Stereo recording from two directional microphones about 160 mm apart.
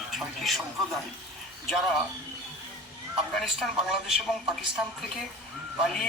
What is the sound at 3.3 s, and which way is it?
A man's voice, centre (ahead or behind).